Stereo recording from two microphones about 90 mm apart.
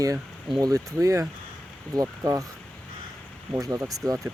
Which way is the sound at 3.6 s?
40° right (ahead or behind).